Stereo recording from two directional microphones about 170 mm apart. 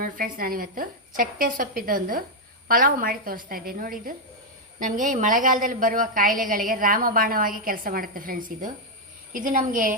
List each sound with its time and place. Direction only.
0.0 s a woman's voice: 55° right (ahead or behind)